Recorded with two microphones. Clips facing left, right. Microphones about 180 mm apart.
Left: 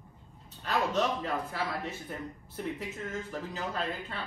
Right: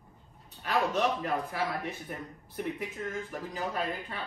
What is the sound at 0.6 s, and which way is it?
Speech, 10° right (ahead or behind).